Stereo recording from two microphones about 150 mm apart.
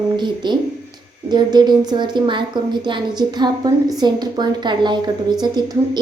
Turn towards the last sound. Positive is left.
turn(degrees=-25)  # may be behind; listen again after turning